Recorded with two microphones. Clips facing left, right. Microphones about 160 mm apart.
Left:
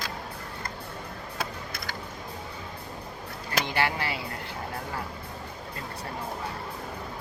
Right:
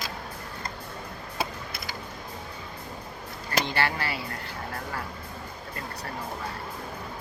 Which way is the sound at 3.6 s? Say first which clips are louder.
Even; 15° left (ahead or behind).